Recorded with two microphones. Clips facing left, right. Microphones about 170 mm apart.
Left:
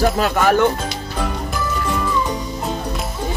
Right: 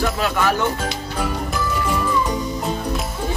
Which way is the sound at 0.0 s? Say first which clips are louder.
Left 4 dB; 45° left (ahead or behind).